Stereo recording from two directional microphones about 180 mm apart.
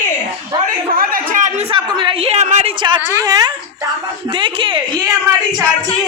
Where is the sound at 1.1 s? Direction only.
45° right (ahead or behind).